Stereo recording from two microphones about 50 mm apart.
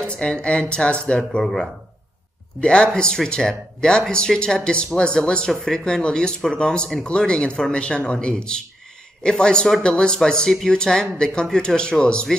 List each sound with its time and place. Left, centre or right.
0.0 s speech: centre
1.4 s speech: centre
2.6 s speech: centre